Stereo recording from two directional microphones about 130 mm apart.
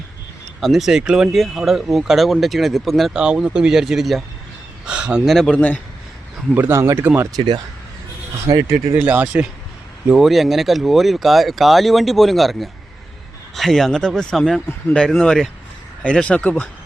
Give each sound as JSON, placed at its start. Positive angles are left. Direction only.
{"t": 0.6, "sound": "speech", "side_deg": 0}
{"t": 6.5, "sound": "speech", "side_deg": -15}
{"t": 7.3, "sound": "speech", "side_deg": -35}
{"t": 9.0, "sound": "speech", "side_deg": -10}